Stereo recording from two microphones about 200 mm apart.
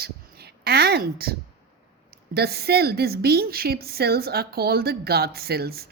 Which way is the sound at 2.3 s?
50° right (ahead or behind).